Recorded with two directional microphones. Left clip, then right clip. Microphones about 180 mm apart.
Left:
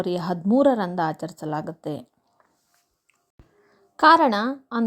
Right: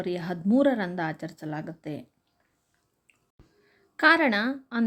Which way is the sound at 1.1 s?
25° left (ahead or behind).